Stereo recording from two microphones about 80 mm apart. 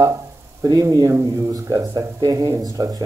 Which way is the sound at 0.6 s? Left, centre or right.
Right.